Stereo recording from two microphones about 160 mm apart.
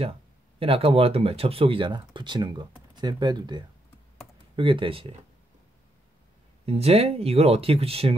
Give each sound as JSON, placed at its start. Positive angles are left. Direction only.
{"t": 0.6, "sound": "speech", "side_deg": -35}
{"t": 6.6, "sound": "speech", "side_deg": -40}